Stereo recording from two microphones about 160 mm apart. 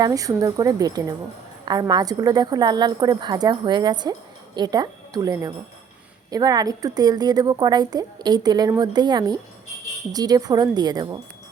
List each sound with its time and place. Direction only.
0.0 s a woman's voice: 20° right (ahead or behind)